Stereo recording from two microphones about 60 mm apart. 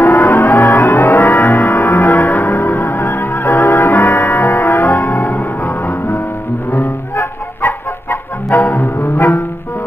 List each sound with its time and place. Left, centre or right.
0.0 s music: left